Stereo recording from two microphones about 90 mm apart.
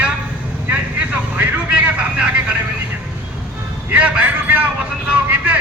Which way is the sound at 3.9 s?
15° right (ahead or behind).